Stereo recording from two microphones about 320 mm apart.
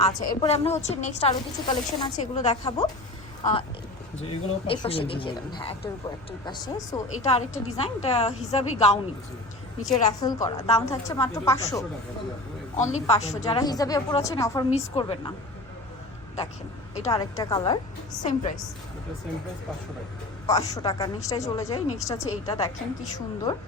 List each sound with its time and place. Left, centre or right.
0.0 s a woman's voice: centre
4.3 s a woman's voice: centre
10.2 s a woman's voice: centre
12.7 s a woman's voice: left
17.0 s a woman's voice: centre
20.5 s a woman's voice: centre